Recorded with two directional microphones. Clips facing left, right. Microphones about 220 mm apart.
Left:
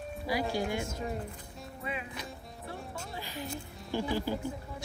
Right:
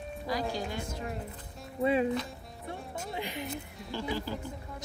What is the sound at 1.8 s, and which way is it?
Speech, 30° right (ahead or behind).